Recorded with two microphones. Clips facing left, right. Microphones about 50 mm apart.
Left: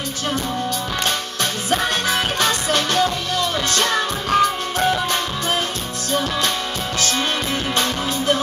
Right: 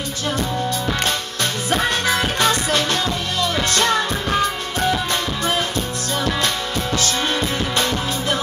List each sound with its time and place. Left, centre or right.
1.7 s music: right
3.7 s music: right
4.3 s music: left
7.0 s music: left